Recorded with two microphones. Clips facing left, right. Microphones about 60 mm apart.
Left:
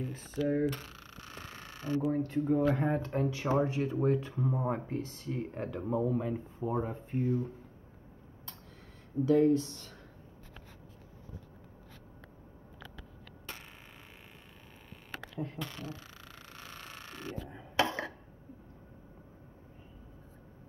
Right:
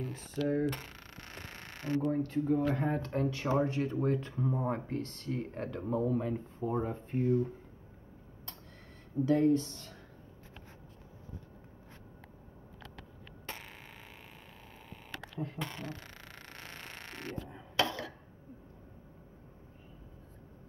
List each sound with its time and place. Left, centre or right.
0.0 s speech: centre
2.0 s speech: centre
9.2 s speech: centre
15.3 s speech: centre
15.6 s speech: right
15.9 s a sound: right
17.7 s chopping: left